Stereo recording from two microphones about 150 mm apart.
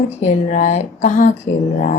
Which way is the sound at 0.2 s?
50° left (ahead or behind).